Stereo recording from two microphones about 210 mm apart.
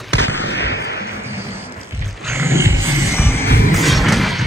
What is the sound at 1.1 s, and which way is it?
Music, 10° right (ahead or behind).